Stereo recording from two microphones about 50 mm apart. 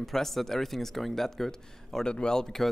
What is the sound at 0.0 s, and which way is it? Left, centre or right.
A man's voice, centre.